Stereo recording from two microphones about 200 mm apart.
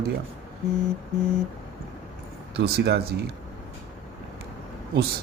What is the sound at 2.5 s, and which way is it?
Speech, 55° right (ahead or behind).